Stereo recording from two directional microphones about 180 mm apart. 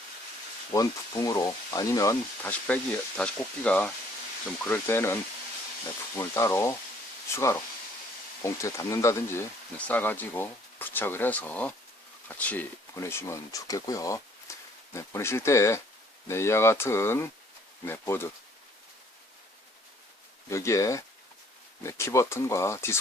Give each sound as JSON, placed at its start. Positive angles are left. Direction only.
{"t": 0.7, "sound": "speech", "side_deg": 20}
{"t": 8.4, "sound": "speech", "side_deg": 15}
{"t": 20.5, "sound": "speech", "side_deg": 15}